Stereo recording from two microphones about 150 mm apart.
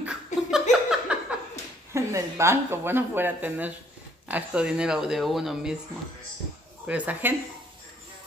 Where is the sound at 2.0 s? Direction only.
20° right (ahead or behind); by 5.8 s 5° right (ahead or behind).